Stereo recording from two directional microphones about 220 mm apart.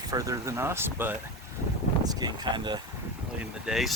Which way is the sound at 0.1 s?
15° right (ahead or behind).